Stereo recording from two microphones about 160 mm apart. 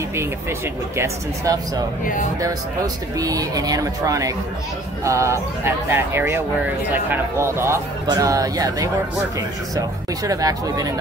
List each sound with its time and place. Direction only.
0.9 s speech: 20° right (ahead or behind)
3.2 s speech: 20° right (ahead or behind)